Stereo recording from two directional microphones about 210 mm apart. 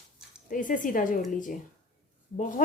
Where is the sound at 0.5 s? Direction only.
40° left (ahead or behind).